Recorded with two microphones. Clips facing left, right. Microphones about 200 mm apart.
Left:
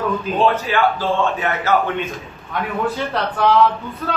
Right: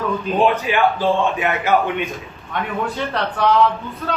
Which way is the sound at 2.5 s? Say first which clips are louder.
Left 2 dB; centre (ahead or behind).